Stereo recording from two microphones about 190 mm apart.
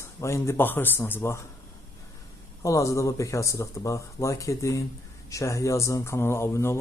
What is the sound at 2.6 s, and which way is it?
Speech, 15° left (ahead or behind).